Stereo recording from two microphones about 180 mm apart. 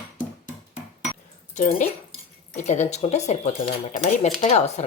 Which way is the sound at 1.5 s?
45° left (ahead or behind).